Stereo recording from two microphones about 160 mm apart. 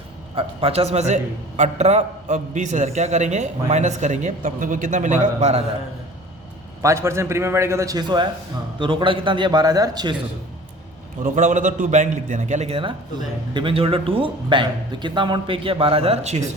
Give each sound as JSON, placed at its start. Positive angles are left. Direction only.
{"t": 0.3, "sound": "a man's voice", "side_deg": -40}
{"t": 6.8, "sound": "a man's voice", "side_deg": -15}
{"t": 11.2, "sound": "a man's voice", "side_deg": -55}